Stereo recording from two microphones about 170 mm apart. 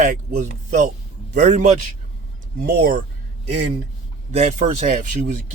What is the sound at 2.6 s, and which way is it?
Speech, 55° right (ahead or behind).